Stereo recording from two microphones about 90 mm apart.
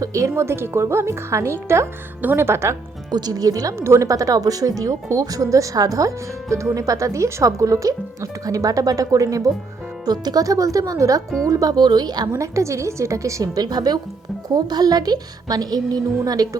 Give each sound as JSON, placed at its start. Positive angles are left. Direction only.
{"t": 0.0, "sound": "speech", "side_deg": -35}
{"t": 3.1, "sound": "a woman's voice", "side_deg": -50}
{"t": 3.8, "sound": "a woman's voice", "side_deg": -30}
{"t": 12.3, "sound": "speech", "side_deg": -35}
{"t": 13.6, "sound": "a woman's voice", "side_deg": -50}